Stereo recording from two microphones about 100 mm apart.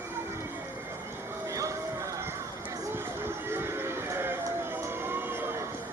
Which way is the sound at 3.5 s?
25° right (ahead or behind).